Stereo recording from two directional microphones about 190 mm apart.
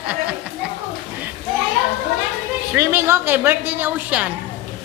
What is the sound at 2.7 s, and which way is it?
A woman's voice, 10° right (ahead or behind).